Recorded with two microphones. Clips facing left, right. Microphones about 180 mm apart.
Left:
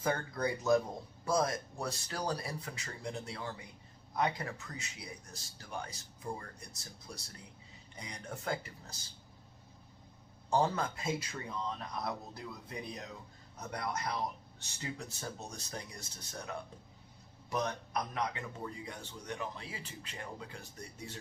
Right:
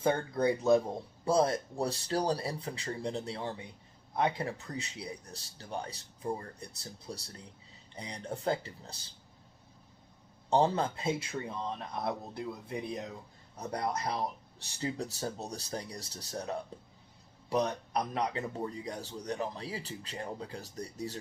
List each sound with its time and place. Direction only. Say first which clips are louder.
0.0 s a man's voice: right 5 dB; 25° right (ahead or behind)
10.5 s a man's voice: right 4 dB; 30° right (ahead or behind)